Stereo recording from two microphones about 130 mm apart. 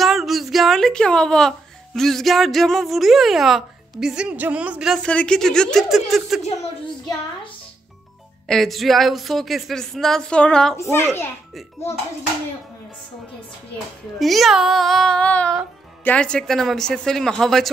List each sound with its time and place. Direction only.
0.0 s a sound: centre (ahead or behind)
2.0 s a woman's voice: 5° left (ahead or behind)
5.0 s a woman's voice: 10° left (ahead or behind)
8.5 s a woman's voice: centre (ahead or behind)
10.8 s a child's voice: 20° left (ahead or behind)
14.1 s a woman's voice: centre (ahead or behind)